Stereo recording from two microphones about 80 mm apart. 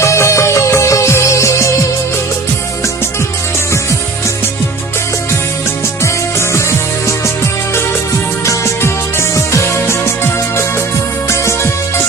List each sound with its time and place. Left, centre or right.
0.0 s music: left
8.4 s music: left
11.3 s music: left